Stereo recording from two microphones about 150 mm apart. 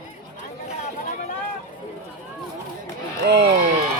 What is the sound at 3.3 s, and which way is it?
Speech, 90° right.